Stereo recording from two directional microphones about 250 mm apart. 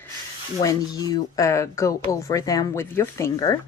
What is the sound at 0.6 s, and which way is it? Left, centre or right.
Speech, centre.